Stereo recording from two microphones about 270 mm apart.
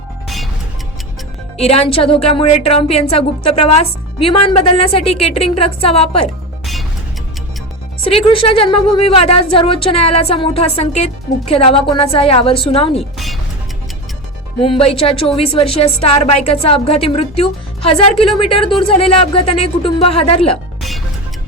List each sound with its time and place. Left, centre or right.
1.5 s speech: left
8.1 s speech: centre
13.0 s speech: centre
14.6 s speech: left